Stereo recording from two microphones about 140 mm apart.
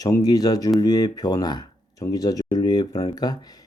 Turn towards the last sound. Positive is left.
turn(degrees=30)  # may be behind; listen again after turning